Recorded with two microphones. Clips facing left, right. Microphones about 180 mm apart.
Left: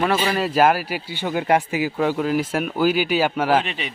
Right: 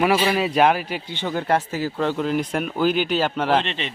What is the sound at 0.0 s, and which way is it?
A man's voice, 10° right (ahead or behind).